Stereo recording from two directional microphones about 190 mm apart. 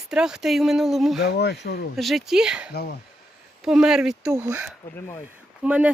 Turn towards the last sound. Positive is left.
turn(degrees=-5)  # may be behind; listen again after turning